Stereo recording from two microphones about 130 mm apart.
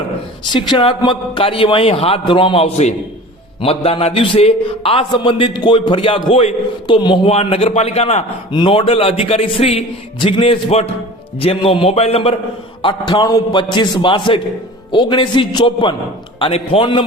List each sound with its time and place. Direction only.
0.5 s a man's voice: 40° left (ahead or behind)
7.3 s a man's voice: 50° left (ahead or behind)
8.5 s a man's voice: 40° left (ahead or behind)
12.8 s a man's voice: 40° left (ahead or behind)